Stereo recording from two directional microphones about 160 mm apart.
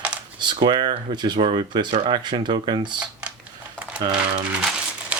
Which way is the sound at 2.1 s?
30° right (ahead or behind).